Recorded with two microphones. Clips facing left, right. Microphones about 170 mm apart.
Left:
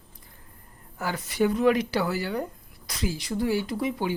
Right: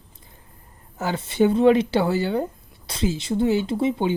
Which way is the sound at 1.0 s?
25° right (ahead or behind).